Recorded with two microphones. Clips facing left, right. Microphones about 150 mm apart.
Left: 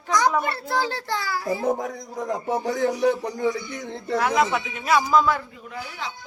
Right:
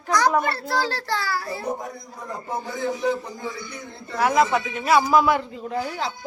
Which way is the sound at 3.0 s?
70° left (ahead or behind).